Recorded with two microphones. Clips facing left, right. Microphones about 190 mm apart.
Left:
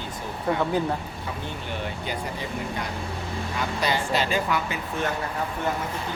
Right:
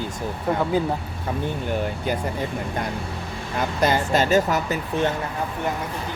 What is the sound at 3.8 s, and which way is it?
Speech, 45° right (ahead or behind).